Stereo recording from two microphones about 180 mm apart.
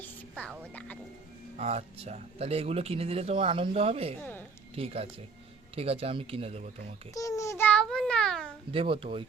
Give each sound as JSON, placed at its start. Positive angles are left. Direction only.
{"t": 0.0, "sound": "music", "side_deg": 5}
{"t": 0.7, "sound": "speech", "side_deg": 10}
{"t": 1.5, "sound": "speech", "side_deg": -35}
{"t": 4.2, "sound": "a woman's voice", "side_deg": 10}
{"t": 4.7, "sound": "speech", "side_deg": -35}
{"t": 7.1, "sound": "a sound", "side_deg": 20}
{"t": 8.7, "sound": "speech", "side_deg": -30}